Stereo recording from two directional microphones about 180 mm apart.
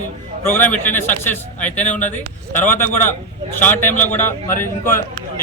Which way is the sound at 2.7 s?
10° left (ahead or behind).